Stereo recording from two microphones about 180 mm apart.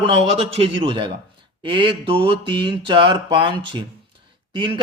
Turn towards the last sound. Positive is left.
turn(degrees=-30)  # may be behind; listen again after turning